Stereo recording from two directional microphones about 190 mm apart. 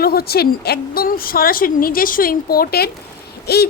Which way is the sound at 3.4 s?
55° left (ahead or behind).